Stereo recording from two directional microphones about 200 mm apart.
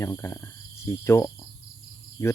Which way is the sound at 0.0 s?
10° left (ahead or behind).